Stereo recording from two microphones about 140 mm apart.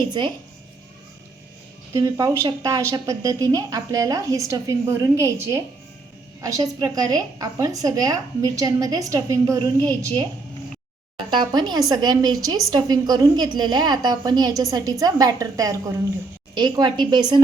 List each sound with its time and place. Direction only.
0.2 s a woman's voice: 35° right (ahead or behind)
1.9 s a woman's voice: 25° right (ahead or behind)
11.2 s a woman's voice: 35° right (ahead or behind)